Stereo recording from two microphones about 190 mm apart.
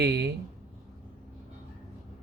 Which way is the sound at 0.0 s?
60° right (ahead or behind).